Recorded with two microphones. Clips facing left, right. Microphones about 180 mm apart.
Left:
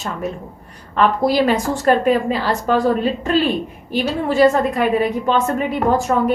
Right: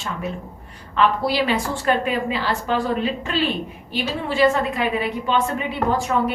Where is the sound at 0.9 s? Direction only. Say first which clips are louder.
Left 4 dB; 45° left (ahead or behind).